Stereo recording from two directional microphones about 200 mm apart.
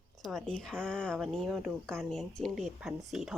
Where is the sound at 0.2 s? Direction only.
Centre (ahead or behind).